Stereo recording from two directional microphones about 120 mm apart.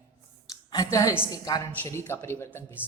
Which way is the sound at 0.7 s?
30° left (ahead or behind).